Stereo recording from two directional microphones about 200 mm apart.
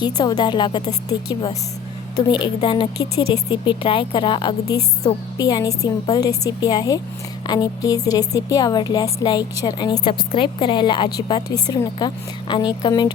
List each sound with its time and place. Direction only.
0.0 s a woman's voice: 20° left (ahead or behind)